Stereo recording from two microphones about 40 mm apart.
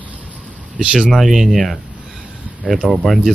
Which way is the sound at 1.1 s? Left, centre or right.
Centre.